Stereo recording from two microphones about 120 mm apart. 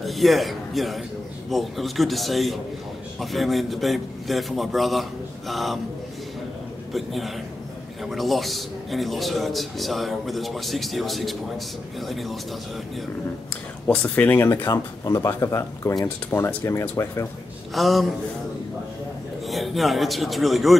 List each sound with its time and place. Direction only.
0.0 s a man's voice: centre (ahead or behind)
6.9 s a man's voice: centre (ahead or behind)
13.8 s speech: 10° left (ahead or behind)
17.7 s a man's voice: centre (ahead or behind)
19.4 s a man's voice: centre (ahead or behind)